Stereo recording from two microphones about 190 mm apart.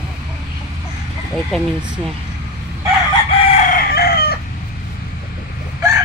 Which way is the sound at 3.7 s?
50° left (ahead or behind).